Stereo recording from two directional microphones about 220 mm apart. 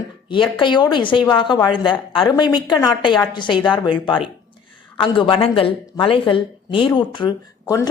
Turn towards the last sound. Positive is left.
turn(degrees=15)  # may be behind; listen again after turning